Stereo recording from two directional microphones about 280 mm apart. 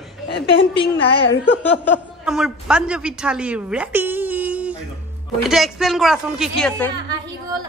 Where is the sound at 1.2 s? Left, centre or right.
Left.